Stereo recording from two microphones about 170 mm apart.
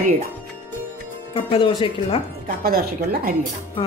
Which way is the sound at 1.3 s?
30° left (ahead or behind).